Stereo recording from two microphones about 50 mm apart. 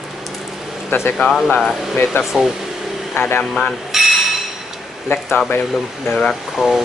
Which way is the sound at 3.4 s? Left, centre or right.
Centre.